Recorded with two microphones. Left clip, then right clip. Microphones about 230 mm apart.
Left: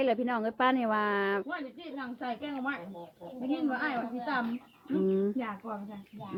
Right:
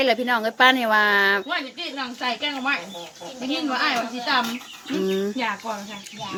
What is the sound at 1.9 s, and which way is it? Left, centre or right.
Speech, right.